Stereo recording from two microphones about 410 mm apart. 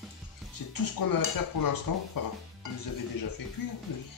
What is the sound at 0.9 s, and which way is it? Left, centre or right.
Dishes, left.